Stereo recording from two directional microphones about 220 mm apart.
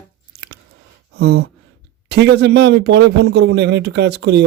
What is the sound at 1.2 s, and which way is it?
A man's voice, 50° right (ahead or behind).